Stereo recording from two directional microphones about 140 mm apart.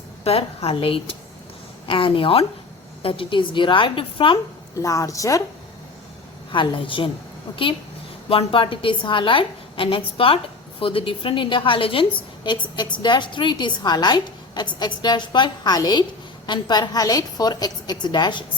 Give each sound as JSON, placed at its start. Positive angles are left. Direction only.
{"t": 0.3, "sound": "a woman's voice", "side_deg": 45}
{"t": 4.8, "sound": "a woman's voice", "side_deg": 25}
{"t": 6.5, "sound": "a woman's voice", "side_deg": 35}